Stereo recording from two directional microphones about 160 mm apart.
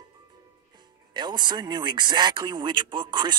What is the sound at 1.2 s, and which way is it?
Speech, 25° right (ahead or behind).